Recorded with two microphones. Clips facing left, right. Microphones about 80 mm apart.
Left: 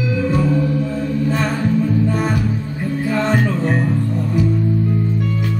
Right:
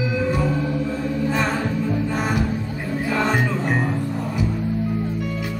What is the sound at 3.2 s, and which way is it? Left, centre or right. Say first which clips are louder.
Music: left 3 dB; centre.